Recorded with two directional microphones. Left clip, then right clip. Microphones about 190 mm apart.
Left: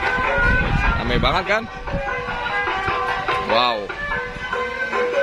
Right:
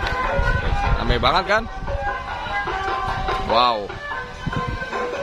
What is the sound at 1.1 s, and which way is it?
Music, centre (ahead or behind).